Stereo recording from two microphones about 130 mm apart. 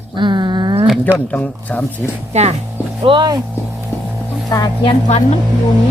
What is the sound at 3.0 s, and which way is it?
Speech, 40° right (ahead or behind).